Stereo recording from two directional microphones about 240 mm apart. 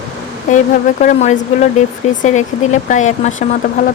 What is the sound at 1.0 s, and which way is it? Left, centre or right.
Speech, left.